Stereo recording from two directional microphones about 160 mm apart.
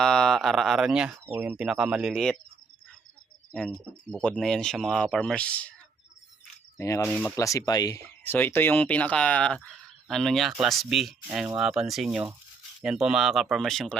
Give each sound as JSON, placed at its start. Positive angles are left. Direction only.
{"t": 0.0, "sound": "speech", "side_deg": 5}
{"t": 3.5, "sound": "speech", "side_deg": 5}
{"t": 6.7, "sound": "speech", "side_deg": 15}
{"t": 7.3, "sound": "speech", "side_deg": 20}
{"t": 8.0, "sound": "speech", "side_deg": 10}